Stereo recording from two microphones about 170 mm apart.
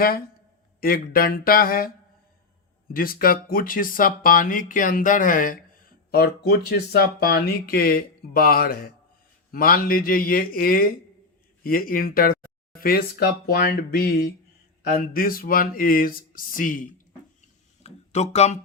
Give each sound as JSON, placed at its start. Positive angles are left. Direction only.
{"t": 0.8, "sound": "speech", "side_deg": 60}
{"t": 2.9, "sound": "speech", "side_deg": 60}
{"t": 17.8, "sound": "speech", "side_deg": 40}